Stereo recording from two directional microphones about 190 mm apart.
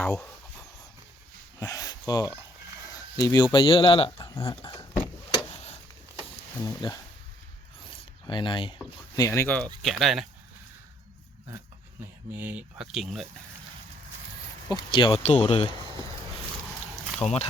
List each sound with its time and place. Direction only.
1.5 s a sound: 15° left (ahead or behind)
2.9 s speech: 20° left (ahead or behind)
6.6 s speech: 20° left (ahead or behind)
7.9 s a sound: 25° left (ahead or behind)
9.1 s speech: 15° left (ahead or behind)
9.8 s speech: centre (ahead or behind)
12.3 s speech: 10° right (ahead or behind)
14.7 s speech: 25° left (ahead or behind)
17.2 s speech: 35° left (ahead or behind)